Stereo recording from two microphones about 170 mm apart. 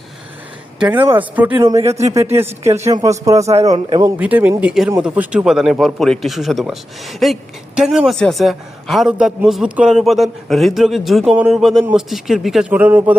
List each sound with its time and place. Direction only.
0.8 s a man's voice: 10° right (ahead or behind)
4.2 s a man's voice: 10° right (ahead or behind)